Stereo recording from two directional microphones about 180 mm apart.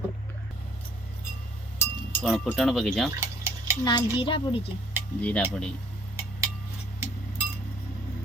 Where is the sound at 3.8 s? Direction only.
20° left (ahead or behind).